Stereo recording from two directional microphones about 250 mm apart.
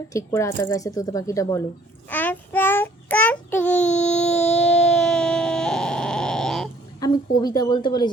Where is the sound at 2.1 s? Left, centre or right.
Centre.